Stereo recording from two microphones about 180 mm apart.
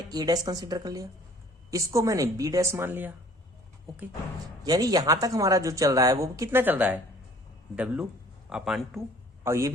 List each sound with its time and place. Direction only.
0.1 s a woman's voice: 20° right (ahead or behind)
4.6 s speech: 20° right (ahead or behind)
8.4 s speech: 5° right (ahead or behind)
9.4 s a man's voice: 15° right (ahead or behind)